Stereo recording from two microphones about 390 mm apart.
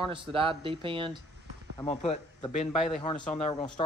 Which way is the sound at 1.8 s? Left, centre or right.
Centre.